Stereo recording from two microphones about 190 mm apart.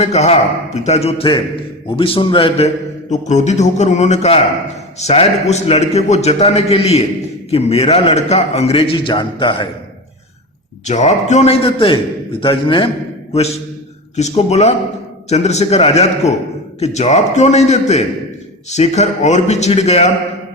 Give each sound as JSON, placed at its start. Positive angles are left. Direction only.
{"t": 0.0, "sound": "a man's voice", "side_deg": 35}
{"t": 10.8, "sound": "a man's voice", "side_deg": 35}
{"t": 14.2, "sound": "a man's voice", "side_deg": 35}